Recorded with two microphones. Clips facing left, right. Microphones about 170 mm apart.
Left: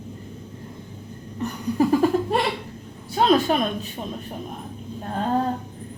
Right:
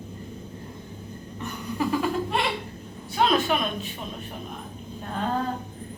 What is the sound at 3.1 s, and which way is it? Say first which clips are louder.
Speech: left 4 dB; 35° left (ahead or behind).